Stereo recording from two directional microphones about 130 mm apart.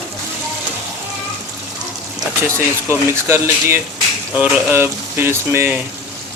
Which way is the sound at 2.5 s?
20° right (ahead or behind).